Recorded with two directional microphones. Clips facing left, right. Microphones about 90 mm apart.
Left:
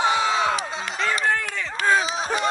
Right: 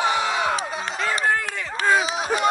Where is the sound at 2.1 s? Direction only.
10° right (ahead or behind).